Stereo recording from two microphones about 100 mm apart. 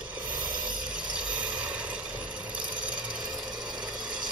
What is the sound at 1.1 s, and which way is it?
Mechanisms, 10° right (ahead or behind).